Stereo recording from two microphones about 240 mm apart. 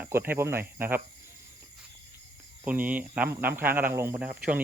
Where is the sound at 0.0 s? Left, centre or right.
Centre.